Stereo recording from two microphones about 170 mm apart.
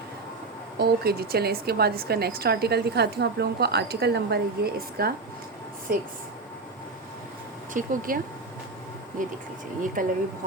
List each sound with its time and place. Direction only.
0.8 s a woman's voice: 65° right (ahead or behind)
7.7 s speech: 50° right (ahead or behind)
9.8 s speech: 55° right (ahead or behind)